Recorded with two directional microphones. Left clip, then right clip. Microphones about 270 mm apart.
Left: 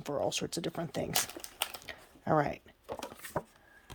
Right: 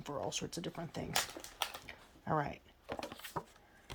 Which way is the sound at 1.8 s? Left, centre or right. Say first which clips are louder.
Left 7 dB; left.